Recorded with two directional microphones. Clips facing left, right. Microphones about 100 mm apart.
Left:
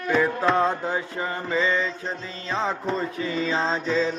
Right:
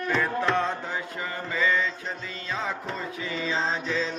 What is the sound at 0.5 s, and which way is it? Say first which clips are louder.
Mantra: left 5 dB; 30° left (ahead or behind).